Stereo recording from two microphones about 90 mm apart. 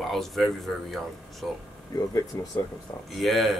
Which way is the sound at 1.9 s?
50° left (ahead or behind).